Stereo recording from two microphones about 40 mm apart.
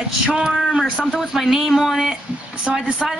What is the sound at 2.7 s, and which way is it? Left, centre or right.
Speech, centre.